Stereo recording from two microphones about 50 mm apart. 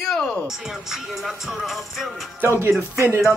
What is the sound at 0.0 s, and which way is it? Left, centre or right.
Music, centre.